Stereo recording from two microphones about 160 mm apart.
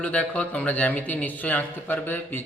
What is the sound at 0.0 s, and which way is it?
A man's voice, 10° left (ahead or behind).